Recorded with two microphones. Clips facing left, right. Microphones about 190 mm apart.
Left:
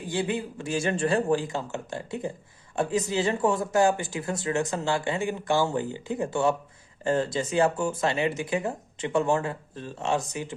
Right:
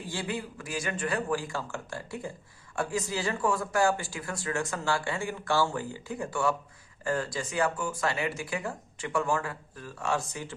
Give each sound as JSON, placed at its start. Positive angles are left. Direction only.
{"t": 0.1, "sound": "speech", "side_deg": 20}